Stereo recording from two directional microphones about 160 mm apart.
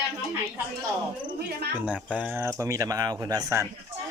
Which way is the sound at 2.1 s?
10° right (ahead or behind).